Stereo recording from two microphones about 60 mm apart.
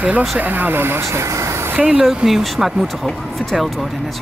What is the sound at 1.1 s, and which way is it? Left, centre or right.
Vehicle, right.